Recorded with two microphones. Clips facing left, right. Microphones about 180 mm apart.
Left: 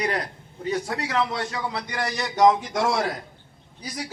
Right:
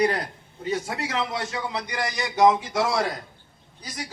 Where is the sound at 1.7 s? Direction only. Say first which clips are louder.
Even; 10° right (ahead or behind).